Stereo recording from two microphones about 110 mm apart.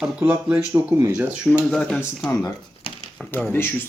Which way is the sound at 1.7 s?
5° left (ahead or behind).